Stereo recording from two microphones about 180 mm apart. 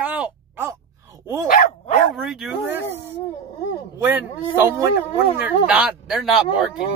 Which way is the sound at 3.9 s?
10° right (ahead or behind).